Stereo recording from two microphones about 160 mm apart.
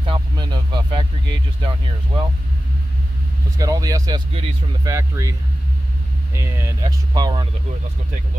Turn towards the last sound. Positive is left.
turn(degrees=-25)  # may be behind; listen again after turning